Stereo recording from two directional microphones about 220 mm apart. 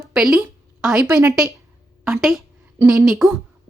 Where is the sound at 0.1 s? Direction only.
Centre (ahead or behind).